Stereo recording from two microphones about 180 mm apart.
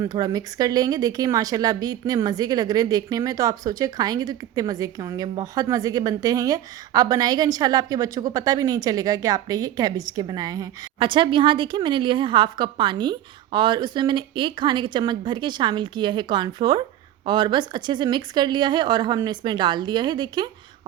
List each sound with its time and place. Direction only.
0.0 s a woman's voice: 20° right (ahead or behind)